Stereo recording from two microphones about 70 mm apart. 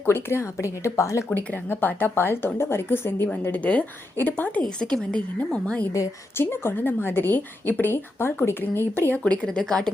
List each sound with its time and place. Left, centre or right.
0.0 s a woman's voice: left
1.3 s a woman's voice: left
4.8 s a woman's voice: centre
6.3 s a woman's voice: left
9.2 s a woman's voice: centre